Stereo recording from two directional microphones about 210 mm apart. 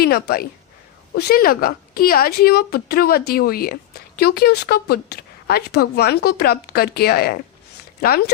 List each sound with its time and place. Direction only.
0.0 s speech: 45° left (ahead or behind)